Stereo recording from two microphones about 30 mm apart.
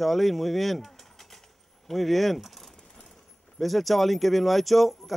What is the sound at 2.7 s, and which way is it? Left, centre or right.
Coin, centre.